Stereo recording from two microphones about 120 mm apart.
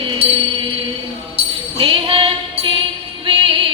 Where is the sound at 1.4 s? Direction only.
50° right (ahead or behind).